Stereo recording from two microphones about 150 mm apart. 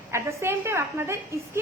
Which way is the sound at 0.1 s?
15° right (ahead or behind).